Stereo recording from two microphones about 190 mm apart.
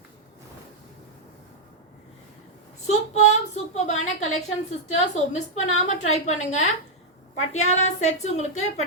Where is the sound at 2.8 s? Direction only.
35° left (ahead or behind).